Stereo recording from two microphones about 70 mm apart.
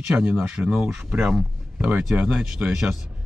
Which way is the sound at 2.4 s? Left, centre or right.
Centre.